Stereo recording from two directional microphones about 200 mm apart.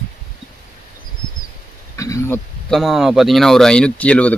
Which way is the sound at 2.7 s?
Centre (ahead or behind).